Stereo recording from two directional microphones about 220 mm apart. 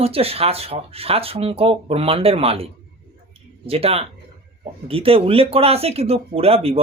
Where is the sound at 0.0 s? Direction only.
25° right (ahead or behind).